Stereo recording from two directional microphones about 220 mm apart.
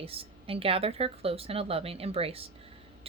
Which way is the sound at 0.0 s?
25° right (ahead or behind).